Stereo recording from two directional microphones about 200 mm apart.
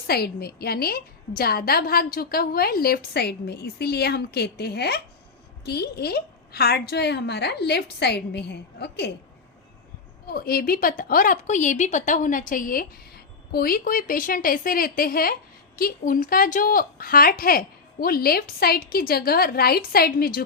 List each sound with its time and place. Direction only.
0.1 s a woman's voice: 50° left (ahead or behind)
10.3 s a woman's voice: 50° left (ahead or behind)